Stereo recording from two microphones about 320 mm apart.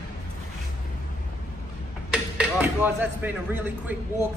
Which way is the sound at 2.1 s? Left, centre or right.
Centre.